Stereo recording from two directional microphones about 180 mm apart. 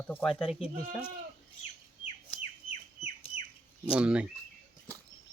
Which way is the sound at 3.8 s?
5° right (ahead or behind).